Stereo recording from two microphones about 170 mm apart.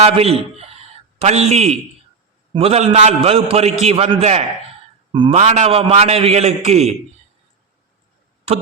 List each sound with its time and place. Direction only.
0.0 s a man's voice: 35° right (ahead or behind)
5.4 s a man's voice: 40° right (ahead or behind)